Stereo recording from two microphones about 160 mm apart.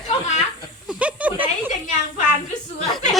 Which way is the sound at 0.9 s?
10° right (ahead or behind).